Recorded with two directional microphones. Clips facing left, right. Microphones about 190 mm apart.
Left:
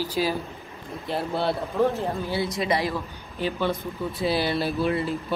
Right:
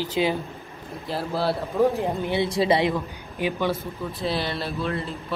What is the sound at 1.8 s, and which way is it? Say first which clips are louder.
A man's voice: right 3 dB; 15° right (ahead or behind).